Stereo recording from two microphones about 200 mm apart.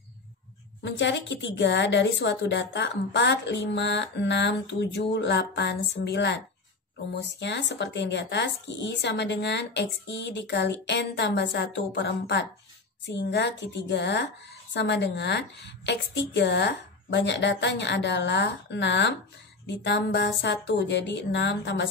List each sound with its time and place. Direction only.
0.8 s a woman's voice: 65° left (ahead or behind)